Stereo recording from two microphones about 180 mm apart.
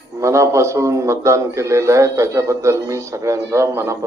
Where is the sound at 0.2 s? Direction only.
15° right (ahead or behind).